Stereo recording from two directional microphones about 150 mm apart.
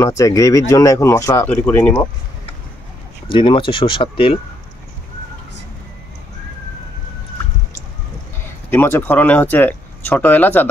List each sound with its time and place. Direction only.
0.0 s speech: 20° left (ahead or behind)
3.3 s speech: 35° left (ahead or behind)
8.6 s speech: 15° left (ahead or behind)